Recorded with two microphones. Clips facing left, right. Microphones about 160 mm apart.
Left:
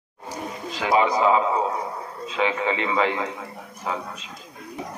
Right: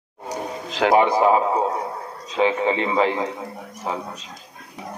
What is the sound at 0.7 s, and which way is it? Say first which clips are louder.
Speech: right 4 dB; 75° right (ahead or behind).